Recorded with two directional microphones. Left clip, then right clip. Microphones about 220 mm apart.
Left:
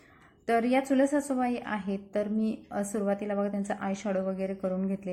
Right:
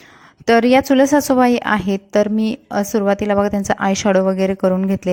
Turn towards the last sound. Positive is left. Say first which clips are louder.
# right 15 dB
turn(degrees=-45)  # may be behind; listen again after turning